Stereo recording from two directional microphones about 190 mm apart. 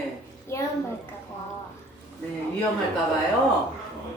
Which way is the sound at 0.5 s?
15° left (ahead or behind).